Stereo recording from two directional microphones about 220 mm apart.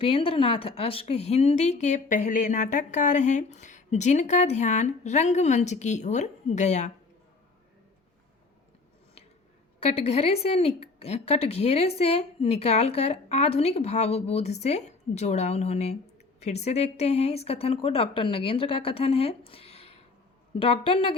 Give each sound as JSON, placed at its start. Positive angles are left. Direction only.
{"t": 0.0, "sound": "a woman's voice", "side_deg": 25}
{"t": 9.8, "sound": "speech", "side_deg": 30}